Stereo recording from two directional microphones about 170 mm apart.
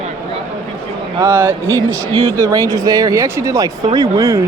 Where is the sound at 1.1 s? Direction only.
15° right (ahead or behind).